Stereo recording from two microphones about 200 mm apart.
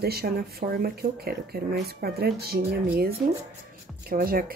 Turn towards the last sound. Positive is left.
turn(degrees=-45)  # may be behind; listen again after turning